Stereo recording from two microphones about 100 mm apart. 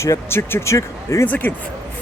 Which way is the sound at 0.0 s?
25° left (ahead or behind).